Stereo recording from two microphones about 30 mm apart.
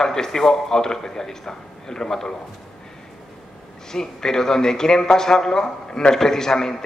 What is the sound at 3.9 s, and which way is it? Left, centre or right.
A man's voice, centre.